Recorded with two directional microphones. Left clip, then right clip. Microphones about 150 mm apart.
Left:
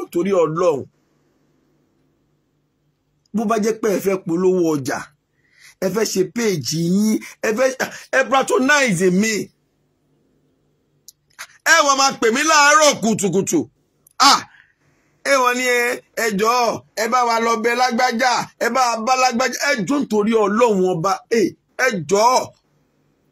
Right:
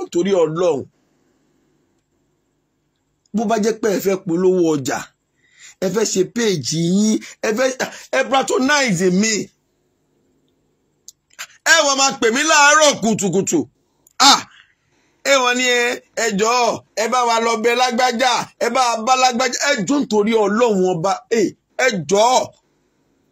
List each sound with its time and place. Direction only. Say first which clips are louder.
0.1 s speech: right 1 dB; 20° right (ahead or behind)
3.3 s speech: right 1 dB; 25° right (ahead or behind)
11.3 s a sound: even; 25° right (ahead or behind)
11.9 s speech: even; 20° right (ahead or behind)
14.1 s a sound: right 1 dB; 30° right (ahead or behind)
15.2 s speech: right 1 dB; 25° right (ahead or behind)
21.3 s speech: even; 35° right (ahead or behind)
22.0 s speech: even; 20° right (ahead or behind)